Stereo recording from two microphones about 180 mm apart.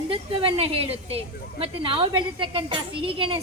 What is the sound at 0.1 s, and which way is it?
A woman's voice, 30° right (ahead or behind).